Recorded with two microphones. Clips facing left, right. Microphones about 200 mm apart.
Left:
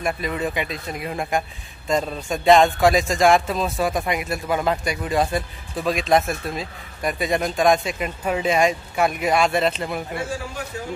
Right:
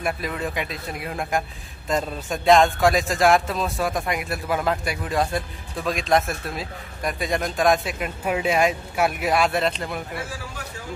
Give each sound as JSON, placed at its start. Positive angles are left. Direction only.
{"t": 0.0, "sound": "speech", "side_deg": 0}